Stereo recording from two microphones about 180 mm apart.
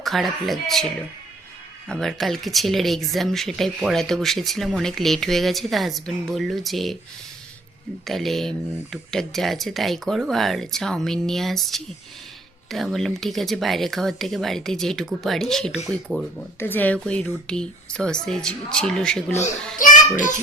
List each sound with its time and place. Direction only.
0.0 s speech: centre (ahead or behind)
1.9 s speech: centre (ahead or behind)
8.0 s speech: centre (ahead or behind)
19.8 s a child's voice: 45° left (ahead or behind)